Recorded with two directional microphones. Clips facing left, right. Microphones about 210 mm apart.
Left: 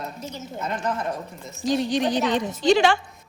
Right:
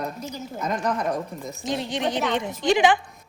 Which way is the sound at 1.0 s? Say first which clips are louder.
Right 3 dB; 15° right (ahead or behind).